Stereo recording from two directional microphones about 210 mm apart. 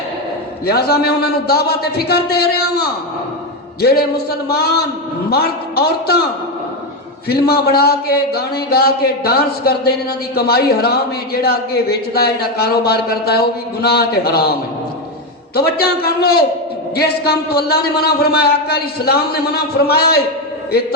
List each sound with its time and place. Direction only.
0.6 s a man's voice: 50° left (ahead or behind)
7.3 s a man's voice: 50° left (ahead or behind)